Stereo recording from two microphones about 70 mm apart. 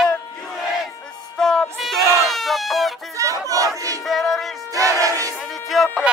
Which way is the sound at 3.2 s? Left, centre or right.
Right.